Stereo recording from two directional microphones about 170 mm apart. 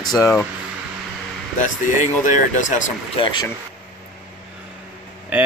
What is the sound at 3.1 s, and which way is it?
Speech, 30° left (ahead or behind).